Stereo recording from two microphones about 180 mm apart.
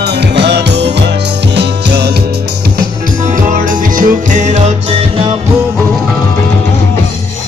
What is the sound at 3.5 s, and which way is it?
Music, 45° right (ahead or behind).